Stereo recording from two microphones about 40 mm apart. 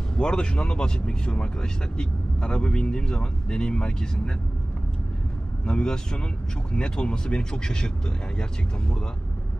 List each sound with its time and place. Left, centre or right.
0.2 s speech: left
5.7 s speech: left